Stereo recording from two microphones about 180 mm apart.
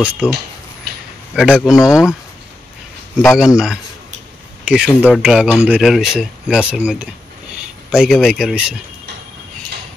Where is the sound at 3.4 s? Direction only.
5° right (ahead or behind).